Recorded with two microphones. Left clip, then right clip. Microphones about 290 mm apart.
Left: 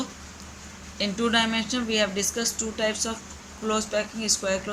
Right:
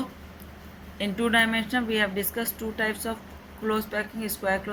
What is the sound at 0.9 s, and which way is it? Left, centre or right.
Speech, left.